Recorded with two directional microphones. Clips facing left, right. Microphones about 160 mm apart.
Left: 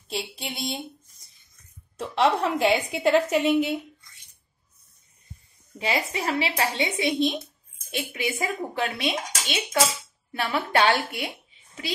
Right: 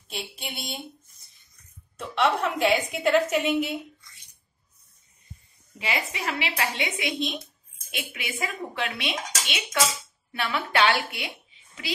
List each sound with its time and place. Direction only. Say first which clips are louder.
0.1 s speech: left 4 dB; 30° left (ahead or behind)
2.0 s speech: left 2 dB; 30° left (ahead or behind)
5.8 s a woman's voice: left 4 dB; 35° left (ahead or behind)